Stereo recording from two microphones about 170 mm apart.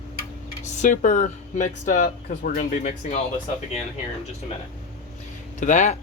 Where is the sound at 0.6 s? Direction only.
45° left (ahead or behind).